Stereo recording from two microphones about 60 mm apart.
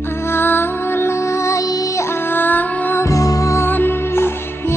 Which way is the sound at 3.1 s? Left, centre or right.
Left.